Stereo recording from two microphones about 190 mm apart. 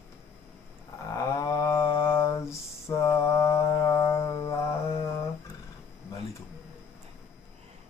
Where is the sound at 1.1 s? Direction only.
15° left (ahead or behind).